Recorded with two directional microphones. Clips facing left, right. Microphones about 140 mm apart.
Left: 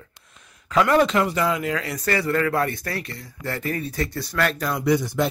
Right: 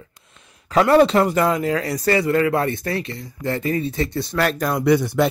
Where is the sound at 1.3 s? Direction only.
45° right (ahead or behind).